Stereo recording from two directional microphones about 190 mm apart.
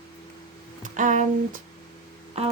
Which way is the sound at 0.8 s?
40° right (ahead or behind).